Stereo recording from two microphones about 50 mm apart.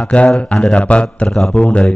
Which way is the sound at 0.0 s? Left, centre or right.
Left.